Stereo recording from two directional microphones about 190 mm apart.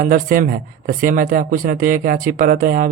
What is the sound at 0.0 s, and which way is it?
Speech, 45° right (ahead or behind).